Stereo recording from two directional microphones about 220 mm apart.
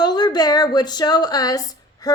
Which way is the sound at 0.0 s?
20° left (ahead or behind).